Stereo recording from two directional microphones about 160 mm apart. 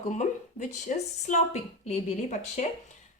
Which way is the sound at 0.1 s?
50° left (ahead or behind).